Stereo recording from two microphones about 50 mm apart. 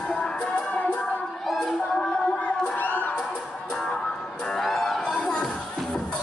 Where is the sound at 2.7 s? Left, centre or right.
Left.